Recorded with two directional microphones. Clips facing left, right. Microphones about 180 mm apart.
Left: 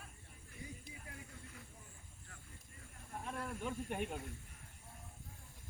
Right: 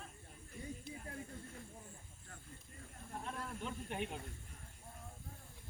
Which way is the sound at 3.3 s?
10° left (ahead or behind).